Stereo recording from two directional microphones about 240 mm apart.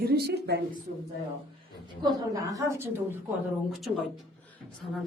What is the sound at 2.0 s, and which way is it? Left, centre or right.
Speech, centre.